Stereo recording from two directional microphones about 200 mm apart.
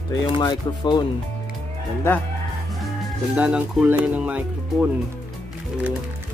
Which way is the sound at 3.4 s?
5° right (ahead or behind).